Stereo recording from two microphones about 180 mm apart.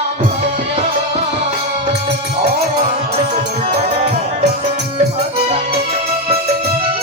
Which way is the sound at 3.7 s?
35° right (ahead or behind).